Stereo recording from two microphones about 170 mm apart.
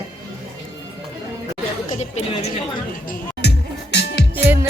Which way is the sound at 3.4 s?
75° left (ahead or behind).